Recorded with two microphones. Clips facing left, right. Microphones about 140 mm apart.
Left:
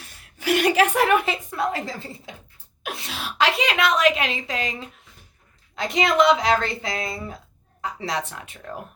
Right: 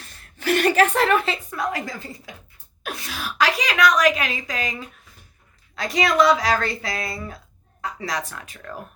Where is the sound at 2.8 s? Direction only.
25° left (ahead or behind).